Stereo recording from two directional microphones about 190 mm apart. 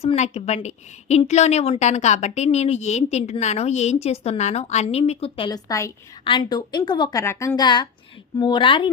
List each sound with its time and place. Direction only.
0.0 s a woman's voice: 35° left (ahead or behind)